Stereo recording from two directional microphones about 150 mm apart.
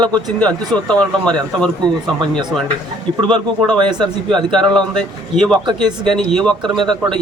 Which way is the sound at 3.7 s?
30° right (ahead or behind).